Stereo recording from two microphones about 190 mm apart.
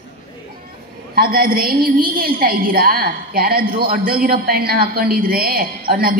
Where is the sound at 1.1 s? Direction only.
50° right (ahead or behind).